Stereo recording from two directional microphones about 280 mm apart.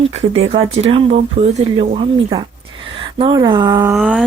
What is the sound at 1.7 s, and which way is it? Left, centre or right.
A woman's voice, right.